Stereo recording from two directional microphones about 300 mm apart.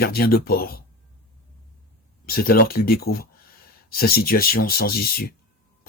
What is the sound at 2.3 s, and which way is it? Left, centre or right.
Speech, left.